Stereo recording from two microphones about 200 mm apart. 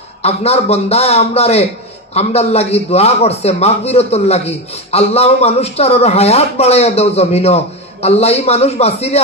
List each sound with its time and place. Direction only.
0.2 s a man's voice: 30° left (ahead or behind)